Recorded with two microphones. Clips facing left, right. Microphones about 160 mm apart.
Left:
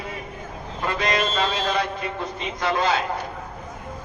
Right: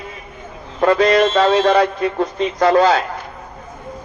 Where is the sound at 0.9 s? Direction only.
40° right (ahead or behind).